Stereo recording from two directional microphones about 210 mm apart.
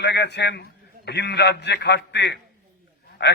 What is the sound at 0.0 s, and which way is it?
A man's voice, 55° left (ahead or behind).